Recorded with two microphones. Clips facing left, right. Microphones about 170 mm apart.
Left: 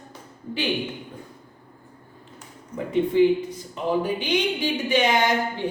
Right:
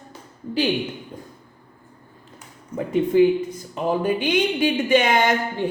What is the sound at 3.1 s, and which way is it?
Speech, 45° right (ahead or behind).